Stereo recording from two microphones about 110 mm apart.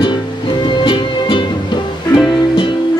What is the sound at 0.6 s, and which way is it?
Music, 45° left (ahead or behind).